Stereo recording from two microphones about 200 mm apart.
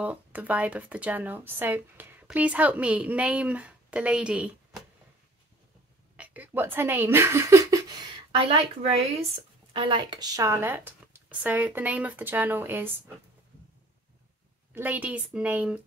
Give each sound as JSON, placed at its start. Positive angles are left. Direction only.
{"t": 0.0, "sound": "speech", "side_deg": -10}
{"t": 6.1, "sound": "speech", "side_deg": -10}
{"t": 8.3, "sound": "speech", "side_deg": -30}
{"t": 14.7, "sound": "speech", "side_deg": -10}